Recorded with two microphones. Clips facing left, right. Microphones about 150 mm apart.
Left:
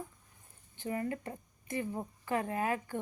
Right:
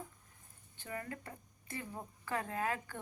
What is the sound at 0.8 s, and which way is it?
A woman's voice, 20° left (ahead or behind).